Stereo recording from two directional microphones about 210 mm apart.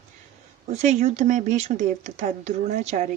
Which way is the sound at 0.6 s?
35° right (ahead or behind).